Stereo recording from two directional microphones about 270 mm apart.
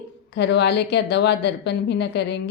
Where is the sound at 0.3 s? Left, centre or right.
Left.